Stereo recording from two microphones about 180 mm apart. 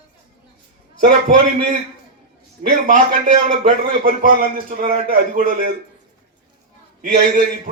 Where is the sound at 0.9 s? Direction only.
50° right (ahead or behind).